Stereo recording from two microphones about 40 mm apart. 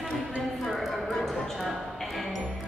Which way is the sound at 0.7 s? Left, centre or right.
Centre.